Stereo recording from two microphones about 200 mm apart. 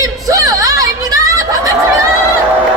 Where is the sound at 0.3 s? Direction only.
15° right (ahead or behind).